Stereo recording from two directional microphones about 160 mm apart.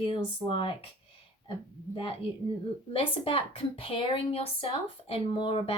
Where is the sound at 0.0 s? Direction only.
30° left (ahead or behind).